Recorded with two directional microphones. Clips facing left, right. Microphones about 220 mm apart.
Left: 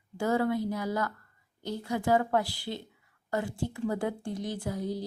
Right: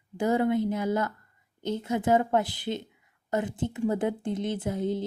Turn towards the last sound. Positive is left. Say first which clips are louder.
# right 4 dB
turn(degrees=-25)  # may be behind; listen again after turning